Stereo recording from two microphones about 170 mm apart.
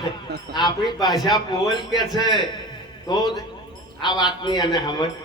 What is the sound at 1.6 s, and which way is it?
Speech, centre (ahead or behind).